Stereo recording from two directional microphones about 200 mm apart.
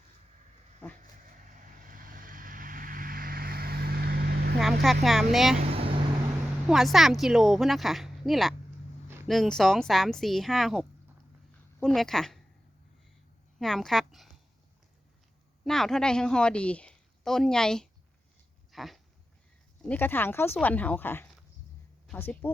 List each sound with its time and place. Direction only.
1.5 s vehicle: 40° right (ahead or behind)
4.5 s vehicle: centre (ahead or behind)
5.0 s a woman's voice: centre (ahead or behind)
5.5 s vehicle: 30° right (ahead or behind)
6.7 s a woman's voice: centre (ahead or behind)
13.6 s a woman's voice: centre (ahead or behind)
15.6 s a woman's voice: centre (ahead or behind)
18.7 s dog: centre (ahead or behind)
19.8 s speech: 10° left (ahead or behind)